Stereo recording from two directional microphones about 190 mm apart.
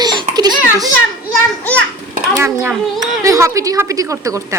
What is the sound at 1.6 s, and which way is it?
Speech, 10° left (ahead or behind).